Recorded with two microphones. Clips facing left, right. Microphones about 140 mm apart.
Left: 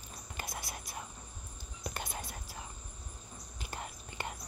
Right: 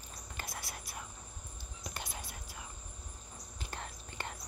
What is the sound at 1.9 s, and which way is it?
Whispering, 50° left (ahead or behind).